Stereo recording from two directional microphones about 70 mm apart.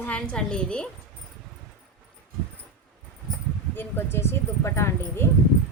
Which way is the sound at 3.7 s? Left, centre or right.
Left.